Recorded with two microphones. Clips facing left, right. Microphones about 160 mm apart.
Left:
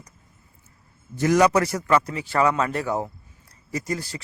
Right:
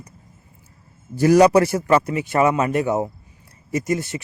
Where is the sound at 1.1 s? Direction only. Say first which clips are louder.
Right 5 dB; 30° right (ahead or behind).